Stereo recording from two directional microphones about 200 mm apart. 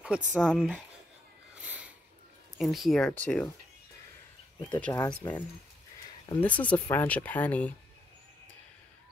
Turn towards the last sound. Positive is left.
turn(degrees=10)  # may be behind; listen again after turning